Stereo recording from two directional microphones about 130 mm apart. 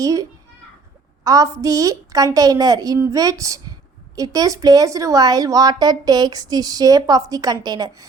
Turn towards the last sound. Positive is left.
turn(degrees=-30)  # may be behind; listen again after turning